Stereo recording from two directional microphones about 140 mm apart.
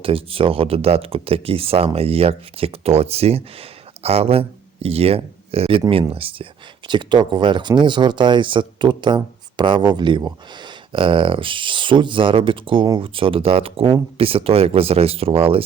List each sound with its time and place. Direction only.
0.0 s speech: 40° right (ahead or behind)